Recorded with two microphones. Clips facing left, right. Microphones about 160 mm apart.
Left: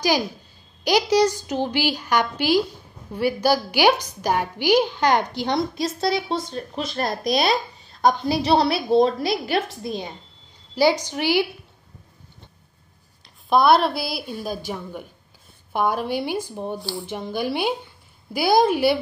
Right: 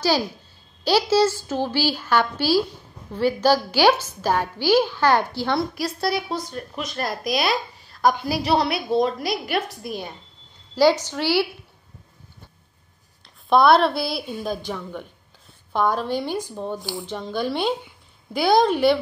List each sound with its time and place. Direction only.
0.8 s a woman's voice: 15° left (ahead or behind)
7.8 s a sound: 25° left (ahead or behind)
8.3 s a woman's voice: 25° left (ahead or behind)
13.5 s a woman's voice: centre (ahead or behind)
16.8 s a woman's voice: 20° right (ahead or behind)
17.1 s a woman's voice: 10° left (ahead or behind)